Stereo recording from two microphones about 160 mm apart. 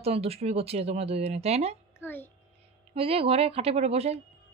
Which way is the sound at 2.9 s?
35° right (ahead or behind).